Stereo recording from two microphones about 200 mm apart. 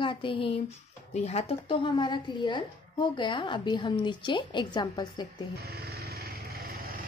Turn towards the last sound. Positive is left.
turn(degrees=-50)  # may be behind; listen again after turning